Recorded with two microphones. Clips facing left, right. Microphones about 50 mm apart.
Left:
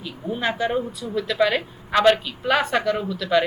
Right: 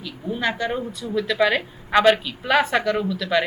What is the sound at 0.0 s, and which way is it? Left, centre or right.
Speech, centre.